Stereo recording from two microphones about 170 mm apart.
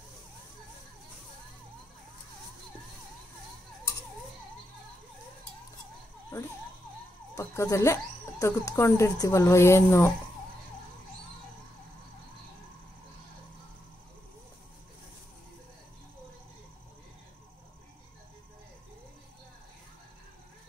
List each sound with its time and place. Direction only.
7.3 s speech: 15° left (ahead or behind)